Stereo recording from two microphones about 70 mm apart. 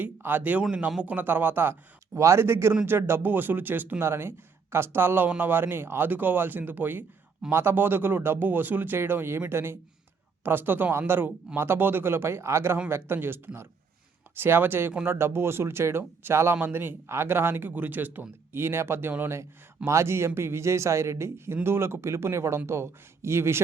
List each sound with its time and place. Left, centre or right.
0.0 s speech: right
0.7 s a man's voice: centre
1.1 s a man's voice: right